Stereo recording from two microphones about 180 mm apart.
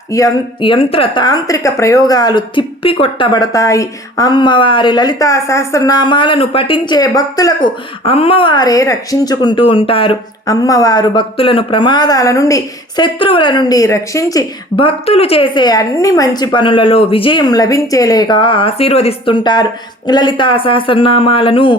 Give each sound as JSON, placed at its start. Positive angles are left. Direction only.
{"t": 0.1, "sound": "speech", "side_deg": 25}